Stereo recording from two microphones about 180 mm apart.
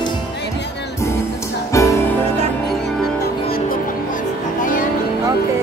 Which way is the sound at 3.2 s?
55° left (ahead or behind).